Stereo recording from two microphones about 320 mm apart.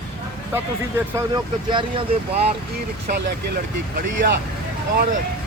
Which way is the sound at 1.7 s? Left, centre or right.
Centre.